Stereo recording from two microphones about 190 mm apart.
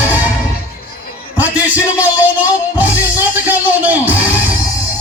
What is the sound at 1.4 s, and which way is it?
Music, 10° right (ahead or behind).